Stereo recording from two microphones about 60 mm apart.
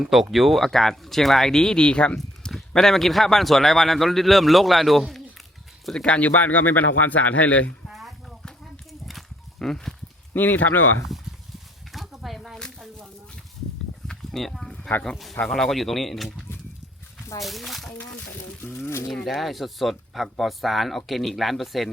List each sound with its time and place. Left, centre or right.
0.0 s speech: centre
2.1 s speech: centre
6.1 s speech: left
7.9 s a sound: centre
10.3 s speech: left
11.9 s a sound: centre
14.1 s a sound: centre
15.0 s speech: centre
17.4 s speech: centre
18.6 s speech: left
19.3 s speech: centre